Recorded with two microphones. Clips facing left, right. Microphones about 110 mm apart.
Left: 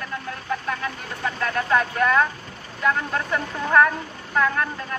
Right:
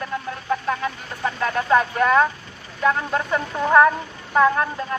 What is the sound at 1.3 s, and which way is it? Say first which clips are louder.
Speech: right 3 dB; 25° right (ahead or behind).